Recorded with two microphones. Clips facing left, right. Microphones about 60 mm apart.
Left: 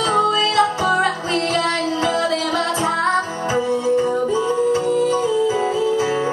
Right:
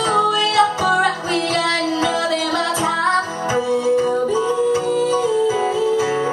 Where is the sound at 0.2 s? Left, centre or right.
Left.